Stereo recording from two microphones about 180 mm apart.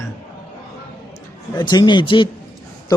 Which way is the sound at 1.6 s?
25° left (ahead or behind).